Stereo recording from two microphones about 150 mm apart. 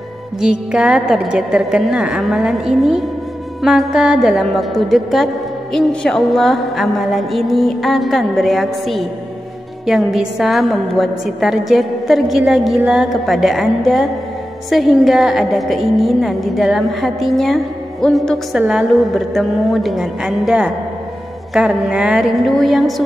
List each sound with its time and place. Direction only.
0.4 s a woman's voice: 5° right (ahead or behind)